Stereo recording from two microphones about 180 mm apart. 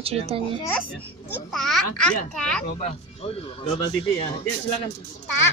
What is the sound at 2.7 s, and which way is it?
Speech, 40° left (ahead or behind).